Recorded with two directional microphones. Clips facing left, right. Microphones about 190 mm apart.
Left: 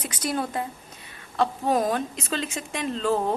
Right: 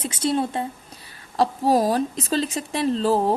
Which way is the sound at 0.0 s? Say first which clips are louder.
Right 5 dB; 25° right (ahead or behind).